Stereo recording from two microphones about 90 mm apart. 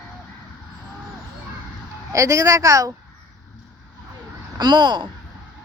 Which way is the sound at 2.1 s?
35° right (ahead or behind).